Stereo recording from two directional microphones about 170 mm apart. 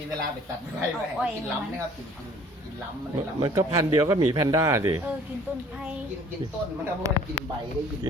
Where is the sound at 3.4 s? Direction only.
20° right (ahead or behind).